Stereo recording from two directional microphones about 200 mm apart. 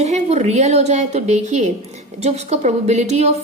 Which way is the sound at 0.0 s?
35° right (ahead or behind).